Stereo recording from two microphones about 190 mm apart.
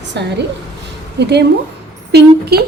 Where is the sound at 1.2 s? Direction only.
60° right (ahead or behind).